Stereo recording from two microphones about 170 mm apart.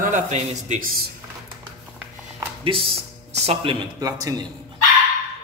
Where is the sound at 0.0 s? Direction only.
45° right (ahead or behind).